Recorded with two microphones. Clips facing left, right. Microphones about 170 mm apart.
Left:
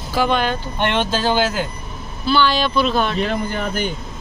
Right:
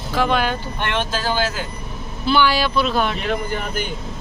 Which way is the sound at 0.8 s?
25° left (ahead or behind).